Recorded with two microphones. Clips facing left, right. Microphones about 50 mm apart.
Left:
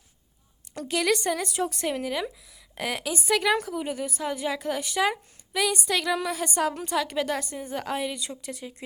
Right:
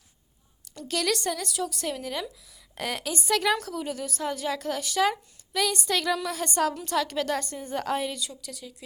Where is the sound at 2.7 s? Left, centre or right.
Centre.